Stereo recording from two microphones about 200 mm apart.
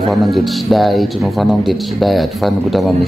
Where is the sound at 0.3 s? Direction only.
Centre (ahead or behind).